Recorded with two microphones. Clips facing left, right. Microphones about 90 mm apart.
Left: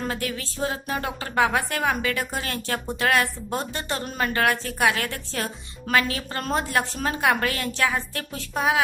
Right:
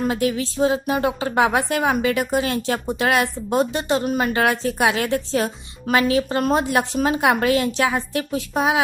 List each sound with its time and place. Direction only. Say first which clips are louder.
0.0 s a woman's voice: right 8 dB; 20° right (ahead or behind)